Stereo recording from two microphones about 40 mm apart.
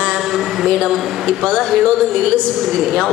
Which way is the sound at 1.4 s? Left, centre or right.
Centre.